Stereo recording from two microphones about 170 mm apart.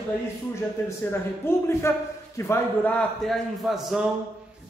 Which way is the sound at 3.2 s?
Centre (ahead or behind).